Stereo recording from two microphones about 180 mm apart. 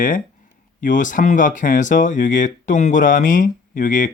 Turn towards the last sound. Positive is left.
turn(degrees=50)  # may be behind; listen again after turning